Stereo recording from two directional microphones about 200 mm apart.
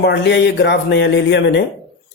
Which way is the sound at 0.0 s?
55° left (ahead or behind).